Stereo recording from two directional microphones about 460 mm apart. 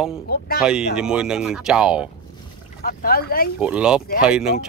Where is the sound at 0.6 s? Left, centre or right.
Centre.